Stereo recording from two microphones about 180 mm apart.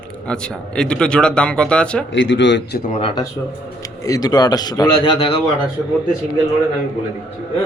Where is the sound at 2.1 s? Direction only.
90° left.